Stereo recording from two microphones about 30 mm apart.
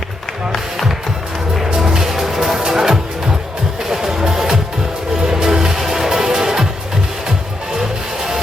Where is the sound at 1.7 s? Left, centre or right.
Right.